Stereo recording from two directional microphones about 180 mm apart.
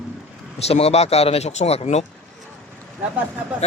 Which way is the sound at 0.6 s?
35° left (ahead or behind).